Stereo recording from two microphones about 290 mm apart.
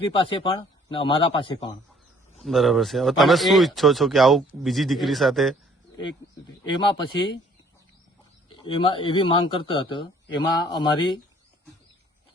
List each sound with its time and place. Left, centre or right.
0.0 s a man's voice: centre
2.4 s speech: centre
6.7 s a man's voice: centre
8.5 s a man's voice: centre